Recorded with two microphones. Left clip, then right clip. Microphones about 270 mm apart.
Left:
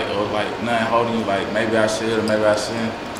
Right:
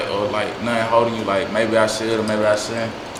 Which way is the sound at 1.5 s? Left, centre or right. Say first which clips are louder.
Right 2 dB; right.